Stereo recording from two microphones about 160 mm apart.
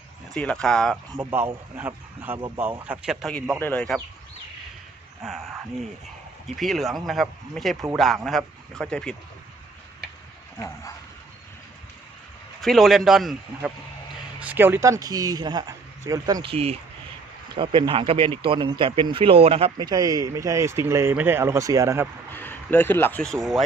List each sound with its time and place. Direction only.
0.3 s speech: 5° left (ahead or behind)
1.2 s speech: 15° right (ahead or behind)
3.6 s speech: 10° left (ahead or behind)
5.2 s speech: centre (ahead or behind)
6.6 s speech: centre (ahead or behind)
12.6 s speech: centre (ahead or behind); by 16.5 s 25° right (ahead or behind)
16.5 s speech: 40° right (ahead or behind)
19.8 s speech: 25° right (ahead or behind)
22.4 s speech: 10° left (ahead or behind)
23.2 s speech: centre (ahead or behind)